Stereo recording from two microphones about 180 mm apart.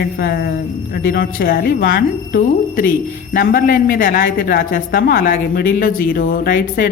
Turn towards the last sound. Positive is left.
turn(degrees=50)  # may be behind; listen again after turning